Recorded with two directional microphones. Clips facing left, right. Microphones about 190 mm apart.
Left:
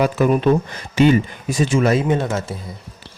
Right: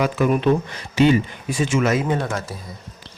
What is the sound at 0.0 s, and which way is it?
Speech, 40° left (ahead or behind).